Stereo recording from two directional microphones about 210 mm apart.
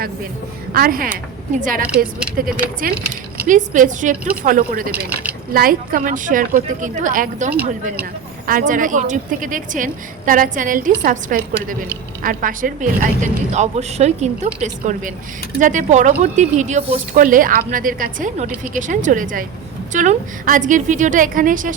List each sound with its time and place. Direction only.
0.7 s a woman's voice: 45° right (ahead or behind)